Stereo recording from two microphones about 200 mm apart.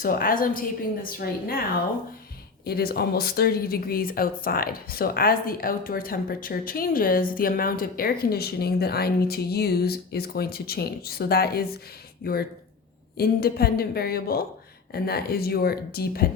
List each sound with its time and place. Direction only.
0.0 s speech: 45° left (ahead or behind)
2.6 s speech: 50° left (ahead or behind)